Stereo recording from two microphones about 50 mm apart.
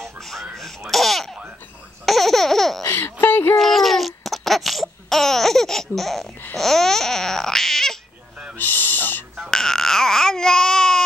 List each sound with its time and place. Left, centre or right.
0.0 s baby laughter: centre
2.0 s laughter: centre
2.9 s speech: left
3.5 s a sound: centre
6.5 s babbling: centre
8.5 s owl: left
9.5 s baby cry: centre